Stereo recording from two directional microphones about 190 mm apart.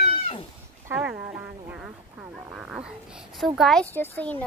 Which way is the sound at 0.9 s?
10° right (ahead or behind).